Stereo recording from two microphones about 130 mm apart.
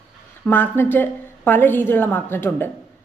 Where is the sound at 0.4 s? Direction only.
15° left (ahead or behind).